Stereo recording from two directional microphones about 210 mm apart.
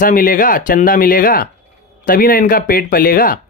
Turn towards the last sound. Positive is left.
turn(degrees=40)  # may be behind; listen again after turning